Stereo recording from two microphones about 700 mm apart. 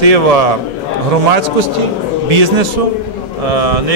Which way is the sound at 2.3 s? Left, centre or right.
Right.